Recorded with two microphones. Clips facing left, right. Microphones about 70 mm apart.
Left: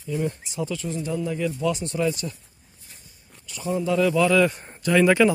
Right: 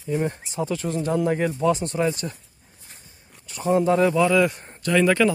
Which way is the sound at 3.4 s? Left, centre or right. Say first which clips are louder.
Right 5 dB; right.